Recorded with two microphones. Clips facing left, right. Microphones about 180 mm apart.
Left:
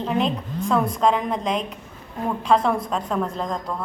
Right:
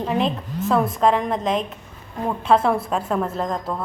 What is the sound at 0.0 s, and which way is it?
A woman's voice, centre (ahead or behind).